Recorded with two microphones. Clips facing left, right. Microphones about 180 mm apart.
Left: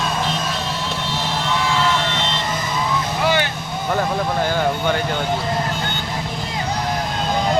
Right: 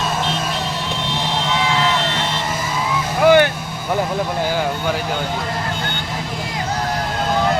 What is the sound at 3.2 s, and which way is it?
Vehicle, 50° right (ahead or behind).